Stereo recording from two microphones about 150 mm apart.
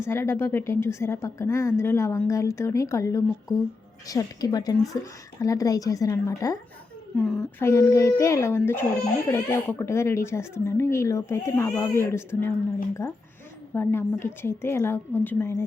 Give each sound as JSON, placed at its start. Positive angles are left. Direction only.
{"t": 0.0, "sound": "a child's voice", "side_deg": 15}
{"t": 7.2, "sound": "speech", "side_deg": 5}
{"t": 7.6, "sound": "a child's voice", "side_deg": 20}
{"t": 13.7, "sound": "a child's voice", "side_deg": 15}